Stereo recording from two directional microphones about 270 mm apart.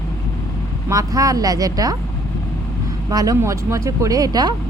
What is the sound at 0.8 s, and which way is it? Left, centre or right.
A woman's voice, centre.